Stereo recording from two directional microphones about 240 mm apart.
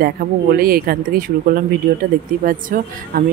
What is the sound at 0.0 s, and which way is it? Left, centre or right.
Speech, right.